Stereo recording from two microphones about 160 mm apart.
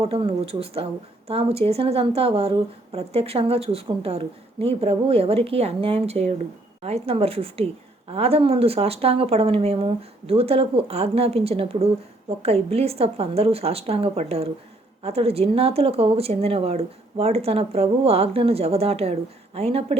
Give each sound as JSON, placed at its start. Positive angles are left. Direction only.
{"t": 0.0, "sound": "speech", "side_deg": -35}